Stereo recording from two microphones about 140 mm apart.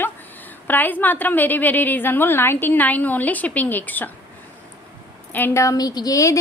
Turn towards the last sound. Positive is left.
turn(degrees=25)  # may be behind; listen again after turning